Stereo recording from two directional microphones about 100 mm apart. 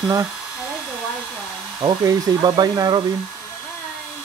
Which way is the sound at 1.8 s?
45° right (ahead or behind).